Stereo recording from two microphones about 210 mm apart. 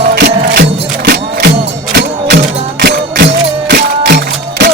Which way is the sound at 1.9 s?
50° right (ahead or behind).